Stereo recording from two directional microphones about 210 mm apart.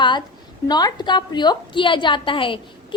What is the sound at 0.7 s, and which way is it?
A woman's voice, 20° left (ahead or behind).